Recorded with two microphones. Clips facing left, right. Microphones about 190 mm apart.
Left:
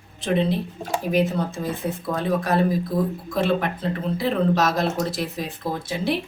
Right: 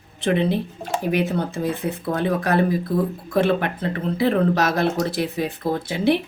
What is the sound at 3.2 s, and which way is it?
Speech, 60° right (ahead or behind).